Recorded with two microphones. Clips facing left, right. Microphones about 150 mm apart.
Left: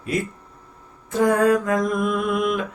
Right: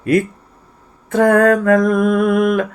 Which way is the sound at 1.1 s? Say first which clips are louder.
Right 6 dB; 65° right (ahead or behind).